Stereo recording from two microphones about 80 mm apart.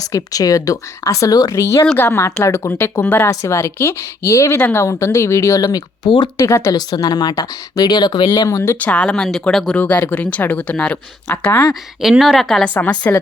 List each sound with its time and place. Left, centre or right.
0.0 s speech: left
1.5 s speech: left
4.6 s a woman's voice: left
4.9 s speech: left
6.3 s speech: left
6.9 s speech: left
8.4 s speech: left
8.8 s speech: centre
9.7 s a woman's voice: centre
12.2 s a woman's voice: centre
12.6 s a woman's voice: centre